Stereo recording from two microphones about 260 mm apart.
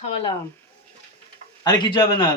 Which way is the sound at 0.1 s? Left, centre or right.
Left.